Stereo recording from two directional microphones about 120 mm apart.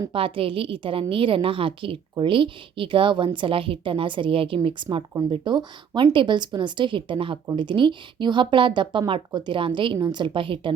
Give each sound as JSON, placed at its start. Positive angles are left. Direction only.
{"t": 0.1, "sound": "a woman's voice", "side_deg": -50}